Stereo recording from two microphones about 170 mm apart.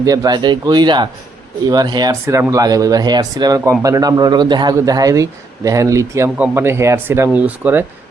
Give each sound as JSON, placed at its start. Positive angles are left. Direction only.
{"t": 0.0, "sound": "speech", "side_deg": -20}